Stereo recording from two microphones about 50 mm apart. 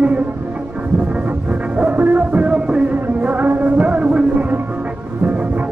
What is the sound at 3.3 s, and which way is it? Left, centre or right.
Music, right.